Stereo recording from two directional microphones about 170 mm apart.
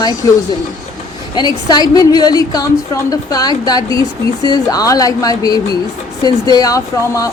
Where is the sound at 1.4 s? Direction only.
25° left (ahead or behind).